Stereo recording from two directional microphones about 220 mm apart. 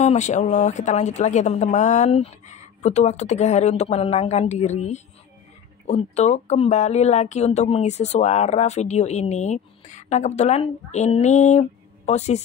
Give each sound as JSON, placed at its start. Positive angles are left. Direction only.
{"t": 0.0, "sound": "speech", "side_deg": 30}